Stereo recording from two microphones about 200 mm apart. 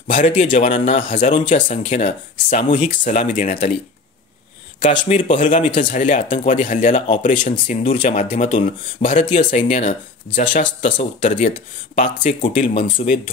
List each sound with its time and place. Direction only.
0.1 s speech: 40° left (ahead or behind)
5.0 s speech: 40° left (ahead or behind)
10.8 s speech: 30° left (ahead or behind)